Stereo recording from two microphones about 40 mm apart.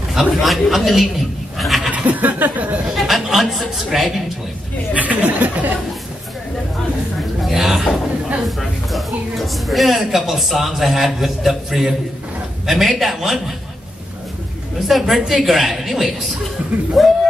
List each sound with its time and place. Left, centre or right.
0.1 s a woman's voice: centre
1.9 s a sound: right
2.9 s a woman's voice: centre
4.9 s speech: right
7.4 s a man's voice: centre
14.8 s a woman's voice: centre